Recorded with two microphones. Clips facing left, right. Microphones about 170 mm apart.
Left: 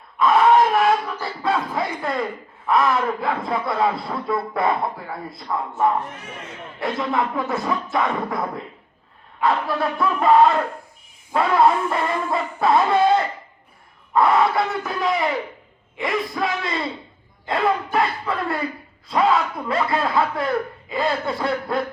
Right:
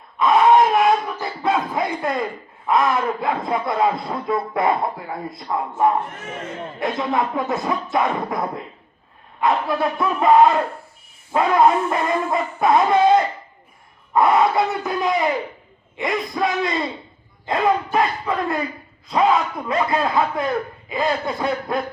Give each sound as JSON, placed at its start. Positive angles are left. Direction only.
{"t": 0.2, "sound": "a sound", "side_deg": -20}
{"t": 2.6, "sound": "speech", "side_deg": -20}
{"t": 5.5, "sound": "synthetic singing", "side_deg": -15}
{"t": 6.7, "sound": "speech", "side_deg": -20}
{"t": 9.4, "sound": "synthetic singing", "side_deg": -15}
{"t": 14.1, "sound": "speech", "side_deg": -20}
{"t": 17.4, "sound": "a sound", "side_deg": -15}
{"t": 17.9, "sound": "synthetic singing", "side_deg": -20}